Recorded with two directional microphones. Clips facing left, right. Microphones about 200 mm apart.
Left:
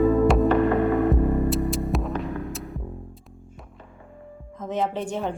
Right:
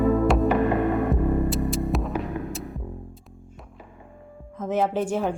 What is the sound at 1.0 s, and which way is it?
Music, centre (ahead or behind).